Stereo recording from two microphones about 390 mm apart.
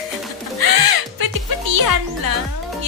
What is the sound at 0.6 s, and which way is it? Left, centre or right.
Music, right.